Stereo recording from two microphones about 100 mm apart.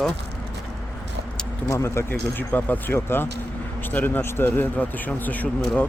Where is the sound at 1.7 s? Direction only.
30° left (ahead or behind).